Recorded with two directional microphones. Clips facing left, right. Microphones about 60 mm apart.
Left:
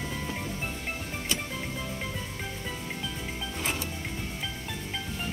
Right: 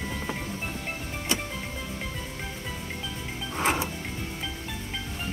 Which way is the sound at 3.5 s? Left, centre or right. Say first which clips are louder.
Right 8 dB; right.